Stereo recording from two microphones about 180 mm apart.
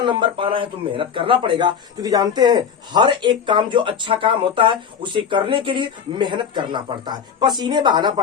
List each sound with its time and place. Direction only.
0.0 s speech: 25° right (ahead or behind)